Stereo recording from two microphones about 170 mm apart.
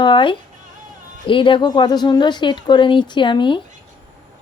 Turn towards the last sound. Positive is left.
turn(degrees=30)  # may be behind; listen again after turning